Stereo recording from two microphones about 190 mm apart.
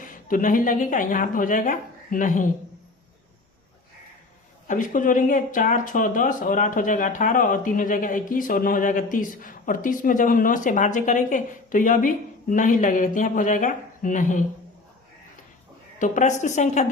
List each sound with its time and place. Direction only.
0.0 s speech: 45° left (ahead or behind)
4.7 s speech: 45° left (ahead or behind)
16.0 s a woman's voice: 40° left (ahead or behind)